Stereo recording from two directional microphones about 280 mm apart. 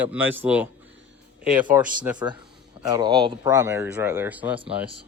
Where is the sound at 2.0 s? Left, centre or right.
Centre.